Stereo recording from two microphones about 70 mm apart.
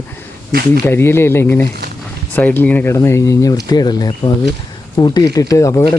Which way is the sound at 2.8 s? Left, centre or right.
Left.